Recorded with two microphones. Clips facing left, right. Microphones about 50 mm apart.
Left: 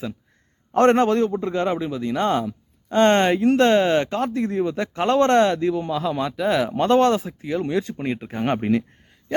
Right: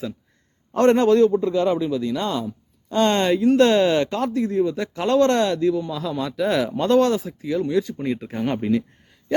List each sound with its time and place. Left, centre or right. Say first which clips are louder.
0.7 s speech: left 1 dB; left
1.0 s speech: right 4 dB; left
2.1 s speech: left 3 dB; left
3.6 s speech: even; left
4.4 s speech: right 1 dB; left
6.3 s speech: right 1 dB; centre
6.7 s speech: left 1 dB; left